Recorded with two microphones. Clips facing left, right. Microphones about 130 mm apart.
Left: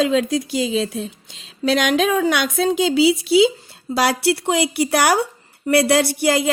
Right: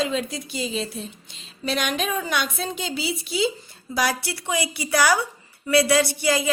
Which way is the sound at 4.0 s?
65° left (ahead or behind).